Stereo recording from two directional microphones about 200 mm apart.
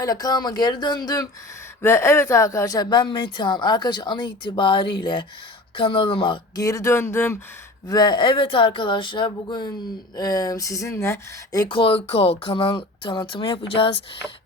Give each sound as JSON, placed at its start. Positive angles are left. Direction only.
{"t": 0.0, "sound": "speech", "side_deg": 20}